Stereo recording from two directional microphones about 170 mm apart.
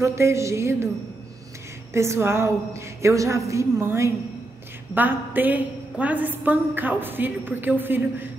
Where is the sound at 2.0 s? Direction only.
15° right (ahead or behind).